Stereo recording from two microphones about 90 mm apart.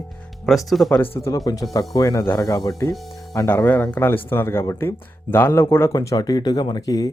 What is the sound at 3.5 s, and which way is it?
Speech, 25° left (ahead or behind).